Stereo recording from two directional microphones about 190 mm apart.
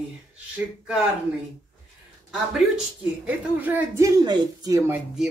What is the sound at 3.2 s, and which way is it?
Speech, 10° right (ahead or behind).